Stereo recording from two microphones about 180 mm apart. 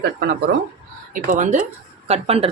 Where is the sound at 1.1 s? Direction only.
45° right (ahead or behind).